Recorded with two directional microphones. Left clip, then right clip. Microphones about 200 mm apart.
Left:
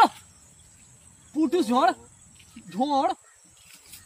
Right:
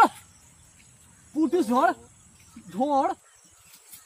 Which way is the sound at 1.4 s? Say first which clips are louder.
Even; 10° left (ahead or behind).